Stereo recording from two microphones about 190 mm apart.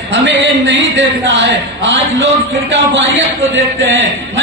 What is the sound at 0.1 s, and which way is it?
A man's voice, 75° right (ahead or behind).